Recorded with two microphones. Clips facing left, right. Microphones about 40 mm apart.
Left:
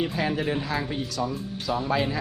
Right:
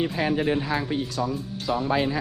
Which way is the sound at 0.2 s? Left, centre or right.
Right.